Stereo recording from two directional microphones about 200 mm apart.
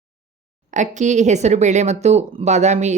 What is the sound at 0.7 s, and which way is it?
A woman's voice, 35° right (ahead or behind).